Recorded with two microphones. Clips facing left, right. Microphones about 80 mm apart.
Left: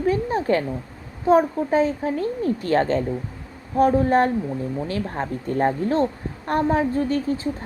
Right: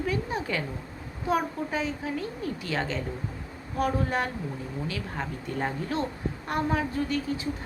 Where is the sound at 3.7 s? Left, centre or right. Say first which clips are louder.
Left 10 dB; left.